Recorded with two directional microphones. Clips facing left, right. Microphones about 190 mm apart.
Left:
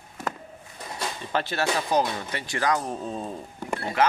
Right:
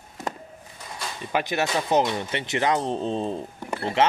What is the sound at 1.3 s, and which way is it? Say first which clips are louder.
Speech: right 2 dB; 15° right (ahead or behind).